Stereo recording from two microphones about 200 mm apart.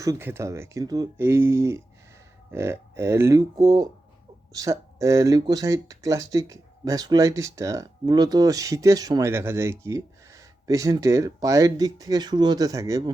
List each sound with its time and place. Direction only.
0.0 s speech: 15° right (ahead or behind)